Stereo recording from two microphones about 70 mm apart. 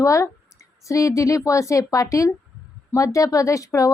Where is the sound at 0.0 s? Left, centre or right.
Left.